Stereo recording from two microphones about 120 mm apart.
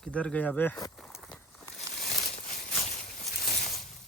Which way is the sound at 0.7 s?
30° left (ahead or behind).